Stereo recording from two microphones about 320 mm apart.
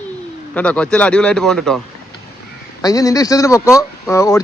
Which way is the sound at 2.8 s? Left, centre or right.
Centre.